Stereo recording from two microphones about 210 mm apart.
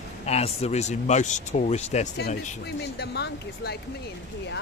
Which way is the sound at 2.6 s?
50° left (ahead or behind).